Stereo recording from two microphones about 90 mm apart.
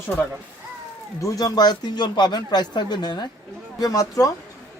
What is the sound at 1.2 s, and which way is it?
Speech, 40° left (ahead or behind).